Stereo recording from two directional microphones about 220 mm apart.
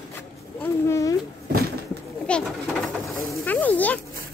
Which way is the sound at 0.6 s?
15° left (ahead or behind).